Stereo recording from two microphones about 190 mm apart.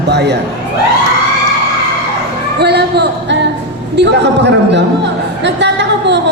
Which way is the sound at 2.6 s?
60° right (ahead or behind).